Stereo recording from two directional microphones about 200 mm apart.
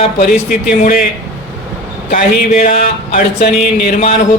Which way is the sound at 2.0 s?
45° left (ahead or behind).